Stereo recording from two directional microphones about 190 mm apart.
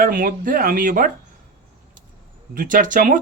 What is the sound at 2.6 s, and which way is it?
Speech, 45° right (ahead or behind).